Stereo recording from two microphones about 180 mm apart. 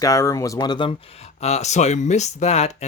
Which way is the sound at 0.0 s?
20° left (ahead or behind).